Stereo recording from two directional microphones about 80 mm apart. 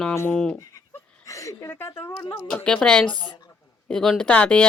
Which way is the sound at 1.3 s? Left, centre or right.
Left.